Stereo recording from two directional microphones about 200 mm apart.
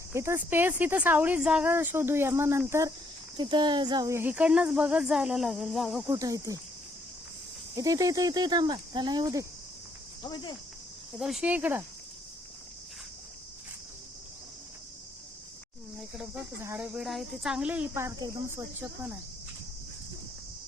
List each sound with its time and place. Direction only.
0.1 s speech: 15° right (ahead or behind)
6.1 s speech: 15° right (ahead or behind)
7.8 s speech: 15° right (ahead or behind)
10.2 s speech: 20° left (ahead or behind)
11.2 s speech: 5° right (ahead or behind)
16.0 s speech: centre (ahead or behind)